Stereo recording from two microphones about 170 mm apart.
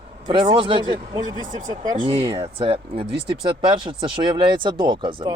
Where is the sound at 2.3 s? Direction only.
35° right (ahead or behind).